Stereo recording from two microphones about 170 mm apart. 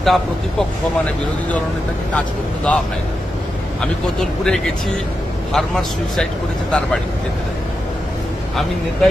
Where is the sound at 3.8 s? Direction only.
Centre (ahead or behind).